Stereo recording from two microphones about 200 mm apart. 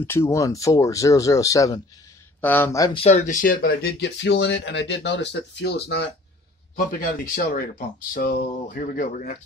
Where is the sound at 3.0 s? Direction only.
35° left (ahead or behind); by 6.1 s 55° left (ahead or behind).